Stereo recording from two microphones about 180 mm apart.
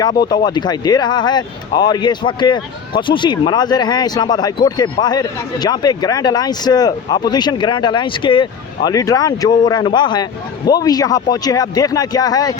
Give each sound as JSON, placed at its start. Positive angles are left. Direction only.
{"t": 0.0, "sound": "speech", "side_deg": 25}